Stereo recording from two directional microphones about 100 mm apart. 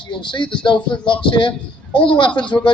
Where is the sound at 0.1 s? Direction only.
50° left (ahead or behind).